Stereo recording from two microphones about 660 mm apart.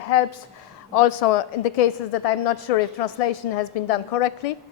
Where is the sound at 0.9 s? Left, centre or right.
Left.